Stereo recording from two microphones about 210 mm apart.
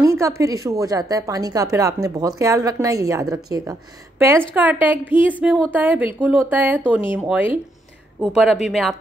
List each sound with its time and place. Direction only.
0.0 s a woman's voice: 15° right (ahead or behind)